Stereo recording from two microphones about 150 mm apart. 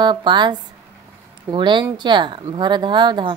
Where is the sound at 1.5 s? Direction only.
30° right (ahead or behind).